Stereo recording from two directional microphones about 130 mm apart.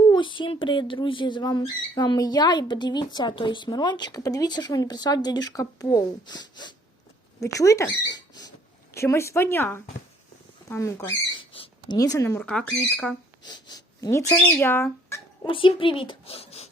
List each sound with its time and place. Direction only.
0.1 s speech: 40° left (ahead or behind); by 11.2 s 20° left (ahead or behind)
11.3 s a sound: 40° left (ahead or behind)
11.9 s speech: 25° left (ahead or behind)
12.4 s speech: 10° left (ahead or behind)
13.4 s speech: 35° left (ahead or behind)
15.4 s a child's voice: 40° left (ahead or behind)